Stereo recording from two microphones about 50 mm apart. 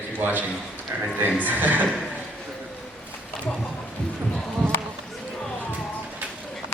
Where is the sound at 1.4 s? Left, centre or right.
Right.